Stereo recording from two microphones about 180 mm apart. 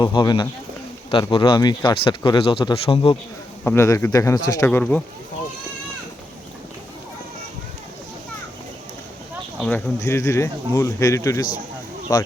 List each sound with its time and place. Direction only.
0.0 s speech: 25° left (ahead or behind)
3.6 s speech: 10° left (ahead or behind)
4.7 s speech: 5° left (ahead or behind)
9.6 s speech: 5° left (ahead or behind)